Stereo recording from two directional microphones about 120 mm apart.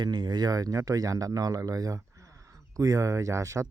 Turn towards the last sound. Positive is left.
turn(degrees=-25)  # may be behind; listen again after turning